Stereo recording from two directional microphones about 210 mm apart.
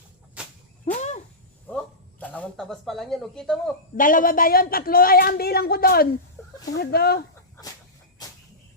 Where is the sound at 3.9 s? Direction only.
40° left (ahead or behind).